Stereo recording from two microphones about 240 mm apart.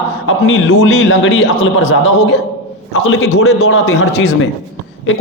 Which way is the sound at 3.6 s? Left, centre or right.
Left.